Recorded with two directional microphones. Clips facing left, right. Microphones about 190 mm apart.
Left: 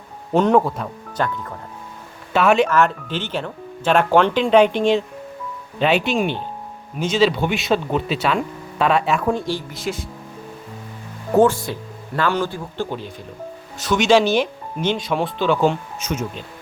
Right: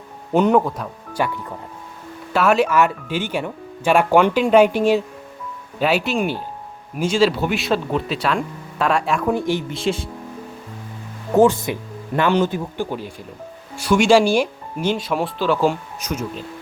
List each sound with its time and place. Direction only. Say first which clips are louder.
0.3 s speech: even; 5° right (ahead or behind)
9.3 s speech: right 3 dB; 20° right (ahead or behind)
11.4 s speech: right 2 dB; 15° right (ahead or behind)